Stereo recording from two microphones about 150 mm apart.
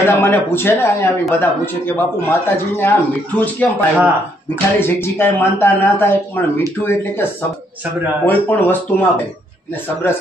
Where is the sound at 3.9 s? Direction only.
10° right (ahead or behind).